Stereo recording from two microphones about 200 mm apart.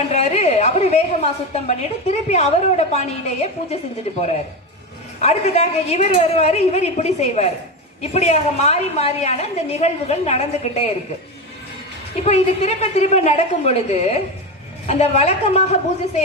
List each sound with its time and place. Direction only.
0.1 s a woman's voice: 35° left (ahead or behind)
12.2 s a woman's voice: 30° left (ahead or behind)